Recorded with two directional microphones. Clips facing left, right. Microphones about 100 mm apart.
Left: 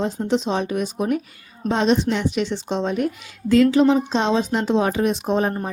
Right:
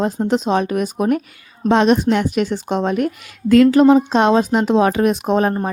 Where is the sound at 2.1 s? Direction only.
55° right (ahead or behind).